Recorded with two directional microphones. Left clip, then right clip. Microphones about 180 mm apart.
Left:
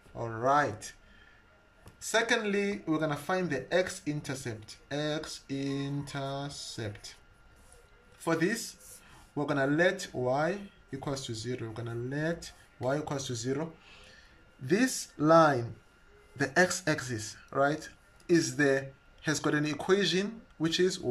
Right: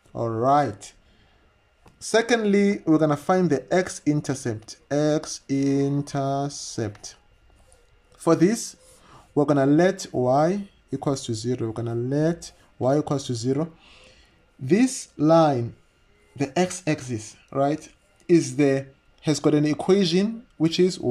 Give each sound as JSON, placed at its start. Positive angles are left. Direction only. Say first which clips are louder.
{"t": 0.1, "sound": "speech", "louder": "right 7 dB", "side_deg": -30}
{"t": 2.0, "sound": "speech", "louder": "right 7 dB", "side_deg": -30}
{"t": 8.2, "sound": "speech", "louder": "right 10 dB", "side_deg": -35}